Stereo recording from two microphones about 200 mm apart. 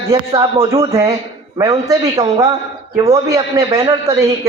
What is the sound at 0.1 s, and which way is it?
A man's voice, 15° right (ahead or behind).